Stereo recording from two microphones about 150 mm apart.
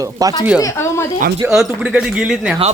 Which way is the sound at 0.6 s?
20° left (ahead or behind).